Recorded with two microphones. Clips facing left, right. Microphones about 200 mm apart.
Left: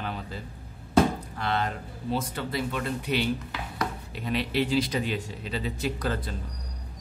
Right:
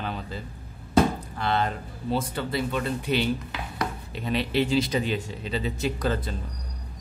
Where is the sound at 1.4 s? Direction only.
30° right (ahead or behind).